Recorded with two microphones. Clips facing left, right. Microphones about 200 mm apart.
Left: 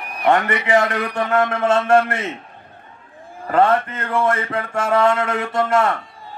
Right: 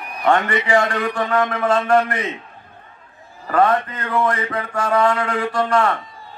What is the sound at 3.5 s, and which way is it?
Speech, 25° left (ahead or behind).